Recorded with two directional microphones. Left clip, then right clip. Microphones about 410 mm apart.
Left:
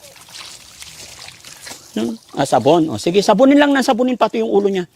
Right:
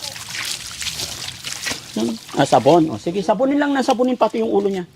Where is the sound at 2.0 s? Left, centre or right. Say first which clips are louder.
Left 2 dB; left.